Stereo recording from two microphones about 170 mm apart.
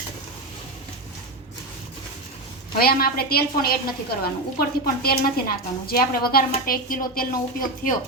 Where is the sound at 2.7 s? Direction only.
65° left (ahead or behind).